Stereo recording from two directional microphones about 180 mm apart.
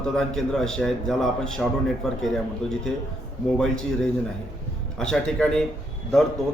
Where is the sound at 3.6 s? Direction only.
5° left (ahead or behind).